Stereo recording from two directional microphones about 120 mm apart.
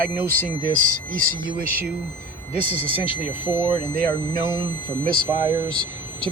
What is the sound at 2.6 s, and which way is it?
Speech, 50° left (ahead or behind).